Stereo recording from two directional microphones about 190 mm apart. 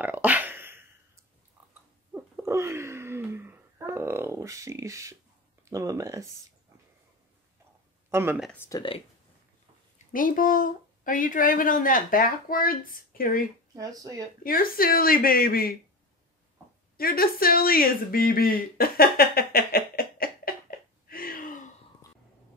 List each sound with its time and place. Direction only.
0.0 s a sound: 10° right (ahead or behind)
5.7 s speech: 15° right (ahead or behind)
8.1 s speech: 15° right (ahead or behind)
8.5 s speech: 20° left (ahead or behind)
10.1 s speech: 45° left (ahead or behind)
13.7 s speech: 20° right (ahead or behind)
14.4 s speech: 50° left (ahead or behind)
16.9 s speech: 50° left (ahead or behind)
21.1 s gasp: 50° left (ahead or behind)